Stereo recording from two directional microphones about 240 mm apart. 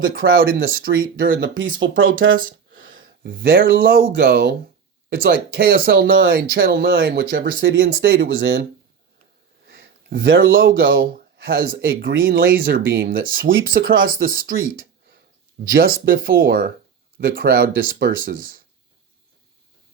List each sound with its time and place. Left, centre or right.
0.1 s speech: right
2.5 s a sound: right
3.2 s speech: right
6.1 s speech: right
6.3 s speech: right
9.6 s a sound: right
10.2 s speech: right
10.6 s speech: right
15.6 s speech: right